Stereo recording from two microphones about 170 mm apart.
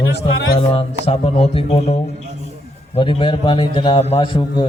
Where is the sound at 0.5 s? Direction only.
35° left (ahead or behind).